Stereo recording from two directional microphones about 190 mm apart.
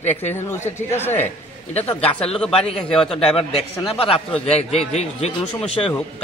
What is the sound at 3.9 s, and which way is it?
A man's voice, 30° left (ahead or behind).